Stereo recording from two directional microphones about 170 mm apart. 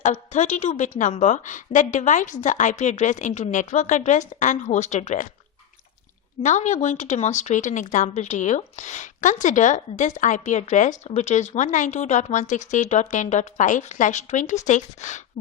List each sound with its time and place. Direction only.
0.0 s speech: 45° left (ahead or behind)
6.4 s speech: 45° left (ahead or behind)